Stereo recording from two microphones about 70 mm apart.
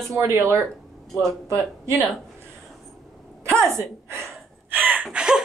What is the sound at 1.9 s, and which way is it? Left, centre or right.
Speech, right.